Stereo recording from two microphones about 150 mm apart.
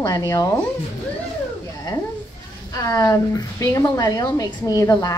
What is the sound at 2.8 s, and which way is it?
A woman's voice, 25° left (ahead or behind).